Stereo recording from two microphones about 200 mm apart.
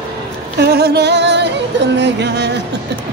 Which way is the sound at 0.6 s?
55° right (ahead or behind).